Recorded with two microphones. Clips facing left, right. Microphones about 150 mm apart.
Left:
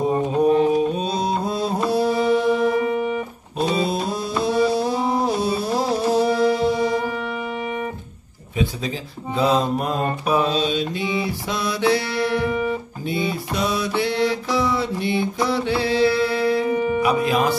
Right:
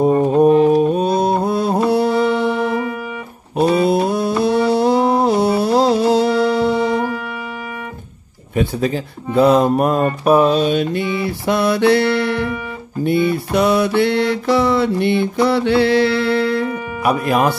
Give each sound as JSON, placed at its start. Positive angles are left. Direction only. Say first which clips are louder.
{"t": 0.0, "sound": "mantra", "louder": "right 6 dB", "side_deg": -50}
{"t": 8.5, "sound": "speech", "louder": "right 6 dB", "side_deg": -60}
{"t": 13.0, "sound": "mantra", "louder": "right 11 dB", "side_deg": -60}